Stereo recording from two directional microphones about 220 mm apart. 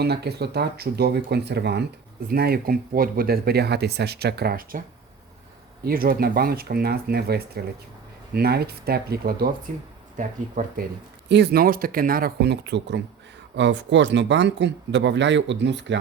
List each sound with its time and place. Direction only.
0.0 s speech: 50° right (ahead or behind)
5.8 s speech: 40° right (ahead or behind)
11.3 s speech: 45° right (ahead or behind)